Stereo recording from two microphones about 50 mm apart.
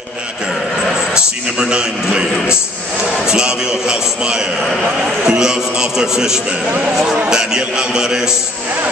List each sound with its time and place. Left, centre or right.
1.1 s a man's voice: centre
3.3 s a sound: centre
7.2 s a man's voice: centre